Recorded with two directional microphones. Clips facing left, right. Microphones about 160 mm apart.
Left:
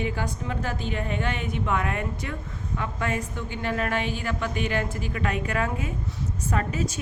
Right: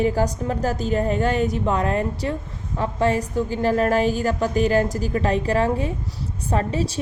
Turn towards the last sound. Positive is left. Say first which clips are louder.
# right 4 dB
turn(degrees=-35)  # may be behind; listen again after turning